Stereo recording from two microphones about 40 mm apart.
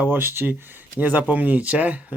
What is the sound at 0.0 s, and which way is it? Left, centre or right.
Speech, right.